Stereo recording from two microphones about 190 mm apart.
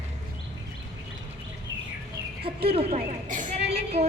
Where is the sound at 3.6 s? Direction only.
60° right (ahead or behind).